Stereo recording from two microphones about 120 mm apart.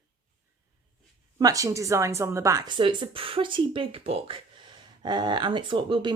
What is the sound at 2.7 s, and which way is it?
A woman's voice, 45° right (ahead or behind).